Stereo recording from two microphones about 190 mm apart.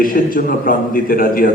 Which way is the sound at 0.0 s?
45° left (ahead or behind).